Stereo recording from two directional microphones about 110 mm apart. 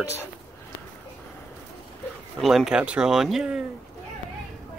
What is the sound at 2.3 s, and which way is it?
Speech, centre (ahead or behind).